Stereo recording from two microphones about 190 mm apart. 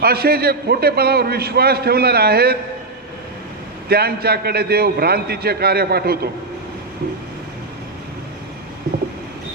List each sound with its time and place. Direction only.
0.0 s a man's voice: 55° right (ahead or behind)
3.8 s a man's voice: 55° right (ahead or behind)